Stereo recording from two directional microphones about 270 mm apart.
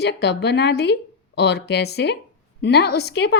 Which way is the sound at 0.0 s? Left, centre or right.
Left.